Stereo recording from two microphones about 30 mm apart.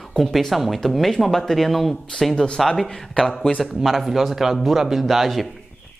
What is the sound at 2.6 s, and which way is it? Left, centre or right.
Speech, centre.